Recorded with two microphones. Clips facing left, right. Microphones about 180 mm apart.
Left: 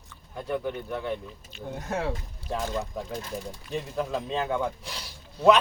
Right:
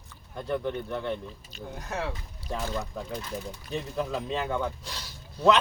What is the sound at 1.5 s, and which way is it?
Speech, 40° right (ahead or behind).